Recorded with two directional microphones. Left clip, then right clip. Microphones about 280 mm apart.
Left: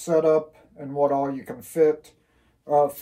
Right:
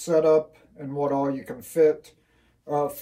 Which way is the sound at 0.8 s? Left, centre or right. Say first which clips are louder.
Left 3 dB; centre.